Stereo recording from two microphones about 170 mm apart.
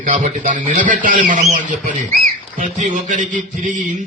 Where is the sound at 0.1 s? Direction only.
50° right (ahead or behind).